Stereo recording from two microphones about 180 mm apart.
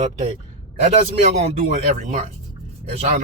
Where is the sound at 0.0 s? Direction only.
35° right (ahead or behind).